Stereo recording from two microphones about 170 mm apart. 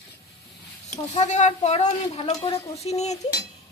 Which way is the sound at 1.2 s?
45° left (ahead or behind).